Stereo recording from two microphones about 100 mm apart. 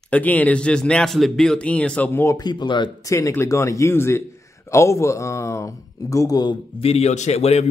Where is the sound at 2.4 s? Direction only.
45° left (ahead or behind).